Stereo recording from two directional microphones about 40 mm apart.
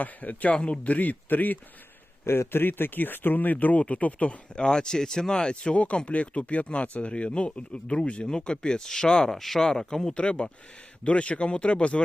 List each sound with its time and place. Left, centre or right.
0.0 s speech: left
0.5 s speech: left
0.9 s speech: left
2.2 s speech: left
4.5 s speech: left
5.7 s speech: left
9.4 s speech: centre
9.6 s speech: centre
10.2 s speech: left